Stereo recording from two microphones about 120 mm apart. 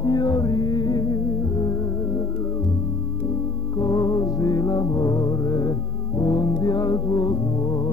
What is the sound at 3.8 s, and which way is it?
Music, 30° left (ahead or behind).